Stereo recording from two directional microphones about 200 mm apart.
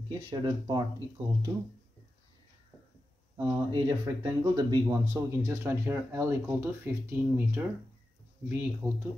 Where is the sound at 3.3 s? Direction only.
20° right (ahead or behind).